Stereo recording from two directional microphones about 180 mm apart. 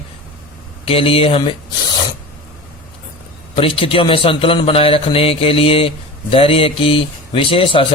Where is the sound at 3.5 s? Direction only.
30° left (ahead or behind).